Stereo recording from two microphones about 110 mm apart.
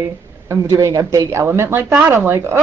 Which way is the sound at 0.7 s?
30° right (ahead or behind).